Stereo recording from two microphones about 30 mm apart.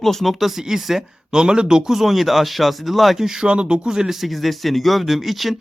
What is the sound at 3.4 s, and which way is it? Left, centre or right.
Speech, right.